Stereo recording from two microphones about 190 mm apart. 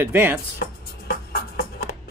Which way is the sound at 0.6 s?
55° left (ahead or behind).